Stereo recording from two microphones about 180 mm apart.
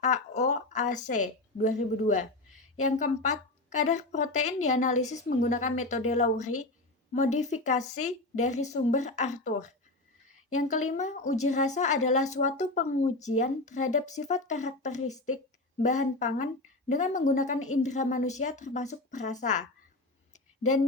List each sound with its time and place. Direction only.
0.0 s a woman's voice: 40° left (ahead or behind)